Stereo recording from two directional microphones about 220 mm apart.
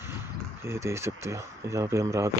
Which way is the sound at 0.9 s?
10° right (ahead or behind).